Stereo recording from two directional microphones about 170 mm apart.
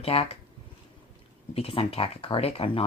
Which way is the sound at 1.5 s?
35° left (ahead or behind).